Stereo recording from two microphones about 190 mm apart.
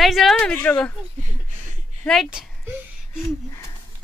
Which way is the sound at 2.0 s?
Centre (ahead or behind).